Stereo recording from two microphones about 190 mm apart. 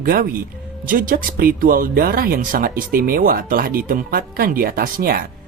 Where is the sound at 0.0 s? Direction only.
50° right (ahead or behind).